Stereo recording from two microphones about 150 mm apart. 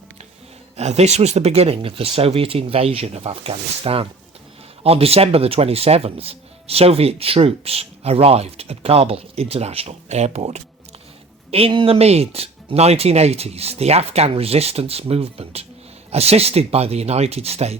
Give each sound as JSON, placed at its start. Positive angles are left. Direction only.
{"t": 0.8, "sound": "speech", "side_deg": -45}
{"t": 11.5, "sound": "speech", "side_deg": -35}